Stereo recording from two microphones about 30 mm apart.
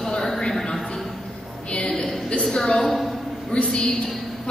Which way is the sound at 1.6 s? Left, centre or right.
Left.